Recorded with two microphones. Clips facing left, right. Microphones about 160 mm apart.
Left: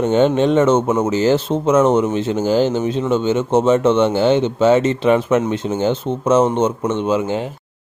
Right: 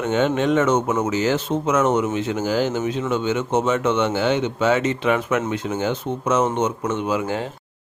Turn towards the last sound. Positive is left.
turn(degrees=20)  # may be behind; listen again after turning